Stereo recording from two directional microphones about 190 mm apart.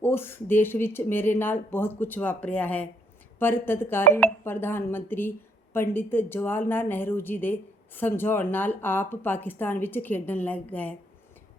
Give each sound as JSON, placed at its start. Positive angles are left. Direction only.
{"t": 0.0, "sound": "a woman's voice", "side_deg": 10}